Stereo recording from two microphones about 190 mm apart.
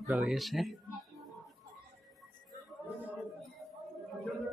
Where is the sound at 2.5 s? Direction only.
Centre (ahead or behind).